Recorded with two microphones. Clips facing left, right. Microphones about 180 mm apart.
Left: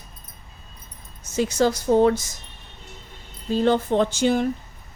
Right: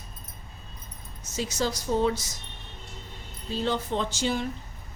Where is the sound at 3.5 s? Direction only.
50° left (ahead or behind).